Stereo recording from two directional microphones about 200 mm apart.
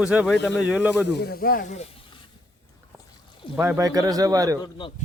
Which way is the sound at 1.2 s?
50° left (ahead or behind).